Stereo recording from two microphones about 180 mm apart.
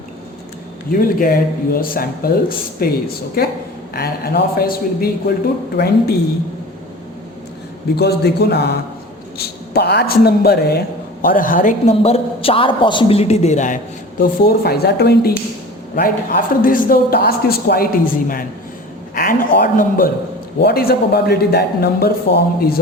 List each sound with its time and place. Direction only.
0.9 s a man's voice: 50° left (ahead or behind)
7.9 s a man's voice: 65° left (ahead or behind)
9.7 s a man's voice: 65° left (ahead or behind); by 13.7 s 40° left (ahead or behind)
14.2 s a man's voice: 55° left (ahead or behind)
16.6 s a man's voice: 50° left (ahead or behind)